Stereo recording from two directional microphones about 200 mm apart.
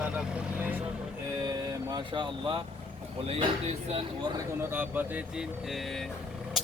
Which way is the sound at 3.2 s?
30° right (ahead or behind).